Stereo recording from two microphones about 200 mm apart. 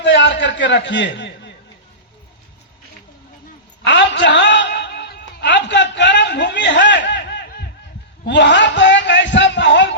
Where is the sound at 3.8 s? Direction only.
65° left (ahead or behind).